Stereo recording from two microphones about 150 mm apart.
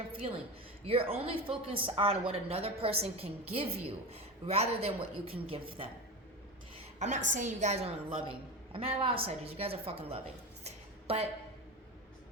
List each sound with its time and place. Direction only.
0.1 s a woman's voice: 40° right (ahead or behind)
7.0 s a woman's voice: 55° right (ahead or behind)
10.6 s a sound: 45° right (ahead or behind)